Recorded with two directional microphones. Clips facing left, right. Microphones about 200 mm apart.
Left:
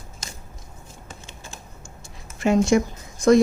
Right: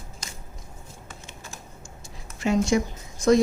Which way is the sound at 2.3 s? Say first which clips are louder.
Left 4 dB; 55° left (ahead or behind).